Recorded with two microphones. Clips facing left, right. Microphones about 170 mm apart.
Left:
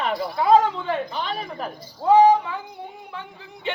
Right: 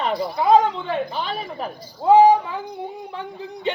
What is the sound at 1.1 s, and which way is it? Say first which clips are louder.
A man's voice: right 1 dB; 5° right (ahead or behind).